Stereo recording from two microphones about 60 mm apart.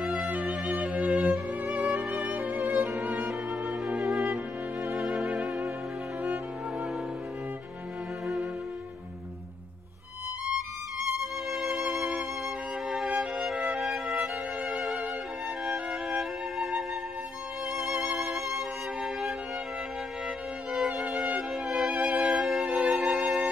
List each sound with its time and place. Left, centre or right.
0.0 s music: centre
0.3 s music: right
5.3 s music: centre
11.1 s violin: centre
12.9 s music: centre
15.6 s music: centre
20.9 s music: centre